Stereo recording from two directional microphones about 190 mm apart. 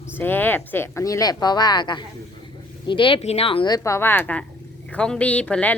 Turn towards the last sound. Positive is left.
turn(degrees=5)  # may be behind; listen again after turning